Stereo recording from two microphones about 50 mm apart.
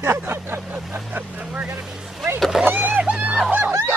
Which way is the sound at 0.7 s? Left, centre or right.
Right.